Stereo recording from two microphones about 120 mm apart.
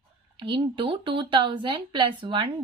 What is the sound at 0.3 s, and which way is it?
A woman's voice, 40° right (ahead or behind).